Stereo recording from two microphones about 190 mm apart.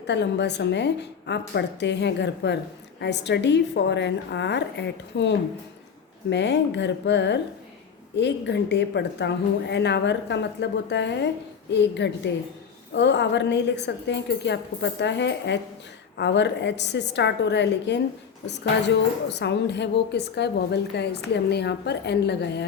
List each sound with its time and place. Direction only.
0.1 s a woman's voice: 65° left (ahead or behind)
6.3 s a woman's voice: 65° left (ahead or behind)
19.3 s a woman's voice: 65° left (ahead or behind)